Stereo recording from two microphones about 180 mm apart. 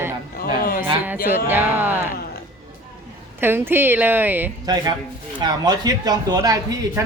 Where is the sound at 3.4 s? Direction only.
10° right (ahead or behind).